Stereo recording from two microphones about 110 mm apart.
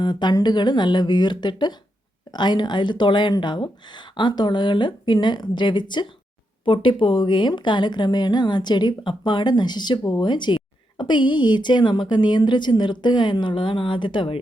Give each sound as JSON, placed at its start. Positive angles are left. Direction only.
{"t": 0.0, "sound": "speech", "side_deg": 45}